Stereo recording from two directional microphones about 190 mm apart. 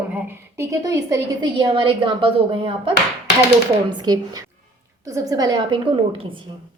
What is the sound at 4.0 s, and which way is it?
A woman's voice, 20° right (ahead or behind).